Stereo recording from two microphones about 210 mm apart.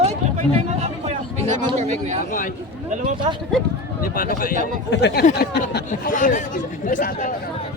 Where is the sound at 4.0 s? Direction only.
40° left (ahead or behind).